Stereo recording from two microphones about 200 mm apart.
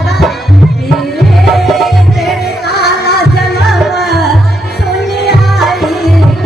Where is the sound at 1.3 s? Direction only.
Centre (ahead or behind).